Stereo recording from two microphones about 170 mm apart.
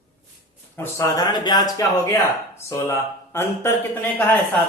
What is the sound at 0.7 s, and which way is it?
Speech, 15° left (ahead or behind).